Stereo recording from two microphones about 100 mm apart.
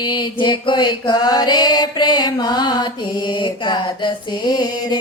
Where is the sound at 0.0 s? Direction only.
50° left (ahead or behind).